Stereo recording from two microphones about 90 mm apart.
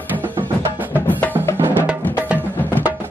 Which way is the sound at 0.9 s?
20° left (ahead or behind).